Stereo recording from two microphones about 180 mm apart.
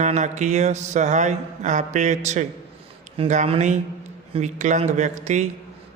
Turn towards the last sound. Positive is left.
turn(degrees=-40)  # may be behind; listen again after turning